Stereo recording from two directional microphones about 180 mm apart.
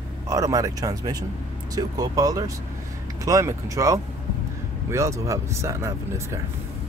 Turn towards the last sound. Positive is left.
turn(degrees=-15)  # may be behind; listen again after turning